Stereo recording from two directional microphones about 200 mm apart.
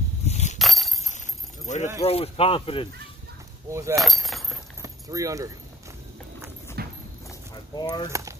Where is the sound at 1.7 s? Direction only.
35° left (ahead or behind).